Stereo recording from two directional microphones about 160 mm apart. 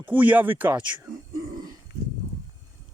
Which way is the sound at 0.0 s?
10° right (ahead or behind).